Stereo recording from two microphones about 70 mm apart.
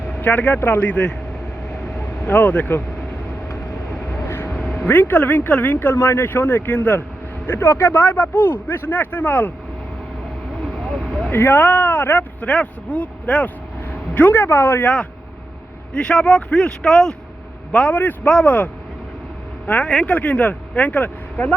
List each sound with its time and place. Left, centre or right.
0.2 s speech: left
2.2 s speech: left
4.3 s vehicle: left
4.9 s speech: left
10.6 s vehicle: centre
11.3 s a man's voice: left
15.9 s speech: centre
17.7 s speech: centre
19.8 s speech: centre
20.1 s speech: centre